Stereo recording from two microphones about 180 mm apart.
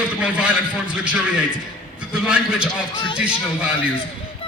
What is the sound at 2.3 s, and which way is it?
A man's voice, 5° right (ahead or behind).